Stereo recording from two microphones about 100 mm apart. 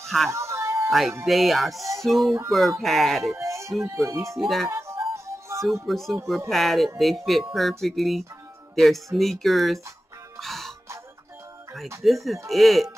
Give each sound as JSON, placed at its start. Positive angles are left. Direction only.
{"t": 0.0, "sound": "speech", "side_deg": 0}
{"t": 0.3, "sound": "music", "side_deg": -30}
{"t": 0.8, "sound": "speech", "side_deg": 0}
{"t": 3.3, "sound": "speech", "side_deg": -30}
{"t": 4.4, "sound": "speech", "side_deg": 0}
{"t": 4.6, "sound": "music", "side_deg": -25}
{"t": 5.9, "sound": "speech", "side_deg": 5}
{"t": 10.4, "sound": "music", "side_deg": 0}
{"t": 12.3, "sound": "speech", "side_deg": 0}